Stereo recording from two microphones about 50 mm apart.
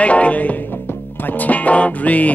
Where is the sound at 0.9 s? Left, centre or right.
Left.